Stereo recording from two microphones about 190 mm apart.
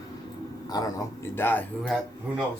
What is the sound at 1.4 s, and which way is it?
Speech, 10° left (ahead or behind).